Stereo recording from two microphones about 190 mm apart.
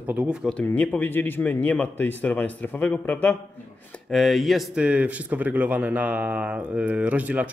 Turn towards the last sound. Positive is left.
turn(degrees=-5)  # may be behind; listen again after turning